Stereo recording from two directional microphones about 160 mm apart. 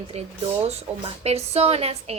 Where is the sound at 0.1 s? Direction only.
40° right (ahead or behind).